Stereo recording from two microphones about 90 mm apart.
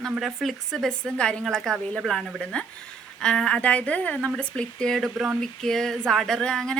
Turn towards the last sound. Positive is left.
turn(degrees=10)  # may be behind; listen again after turning